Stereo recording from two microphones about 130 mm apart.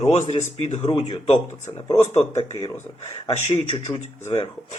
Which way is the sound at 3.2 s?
65° left (ahead or behind).